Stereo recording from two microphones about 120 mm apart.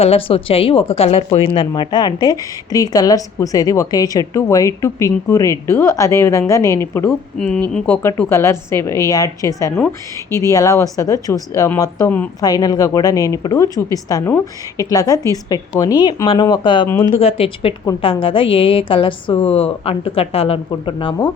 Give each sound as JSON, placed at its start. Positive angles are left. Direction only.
{"t": 0.0, "sound": "a woman's voice", "side_deg": 55}
{"t": 1.5, "sound": "a woman's voice", "side_deg": 40}
{"t": 7.3, "sound": "speech", "side_deg": 10}
{"t": 8.3, "sound": "a woman's voice", "side_deg": 20}
{"t": 16.9, "sound": "a woman's voice", "side_deg": 20}
{"t": 17.2, "sound": "a woman's voice", "side_deg": 55}